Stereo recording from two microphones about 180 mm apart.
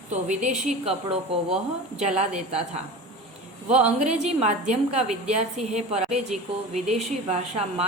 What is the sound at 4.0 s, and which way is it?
A woman's voice, 40° right (ahead or behind).